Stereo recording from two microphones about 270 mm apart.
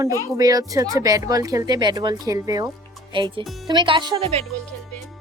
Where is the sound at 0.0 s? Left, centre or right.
Centre.